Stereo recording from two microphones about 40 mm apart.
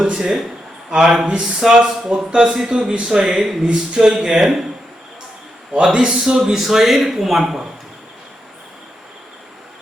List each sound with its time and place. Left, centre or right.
0.2 s speech: centre
3.6 s speech: right; by 4.6 s centre
5.8 s speech: right
6.1 s speech: centre